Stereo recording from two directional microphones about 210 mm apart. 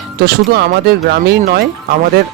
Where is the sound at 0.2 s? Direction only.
50° right (ahead or behind).